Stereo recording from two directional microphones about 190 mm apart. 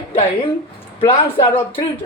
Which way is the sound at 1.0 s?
30° left (ahead or behind).